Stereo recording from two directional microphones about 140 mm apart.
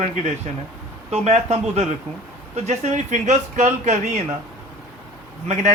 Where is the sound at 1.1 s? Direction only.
50° right (ahead or behind).